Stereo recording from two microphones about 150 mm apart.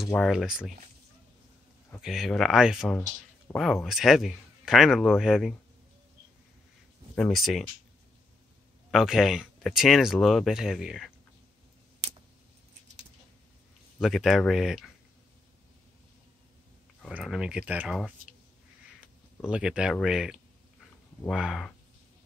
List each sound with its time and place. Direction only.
0.3 s speech: 5° right (ahead or behind)
2.0 s speech: centre (ahead or behind)
7.2 s speech: centre (ahead or behind)
8.9 s speech: centre (ahead or behind)
13.9 s speech: centre (ahead or behind)
17.1 s speech: 5° right (ahead or behind)
19.5 s speech: 5° right (ahead or behind)